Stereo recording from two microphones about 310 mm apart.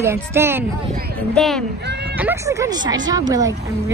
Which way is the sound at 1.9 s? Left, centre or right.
Right.